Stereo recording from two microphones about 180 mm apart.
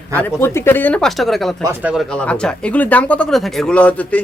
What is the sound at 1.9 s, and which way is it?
Speech, 5° left (ahead or behind).